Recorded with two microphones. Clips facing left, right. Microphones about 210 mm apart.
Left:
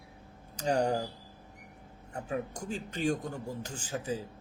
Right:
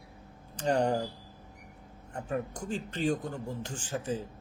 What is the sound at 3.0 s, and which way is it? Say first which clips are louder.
Speech: even; 45° left (ahead or behind).